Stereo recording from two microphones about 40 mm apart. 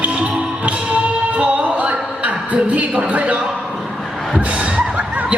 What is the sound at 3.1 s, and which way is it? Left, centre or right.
Speech, right.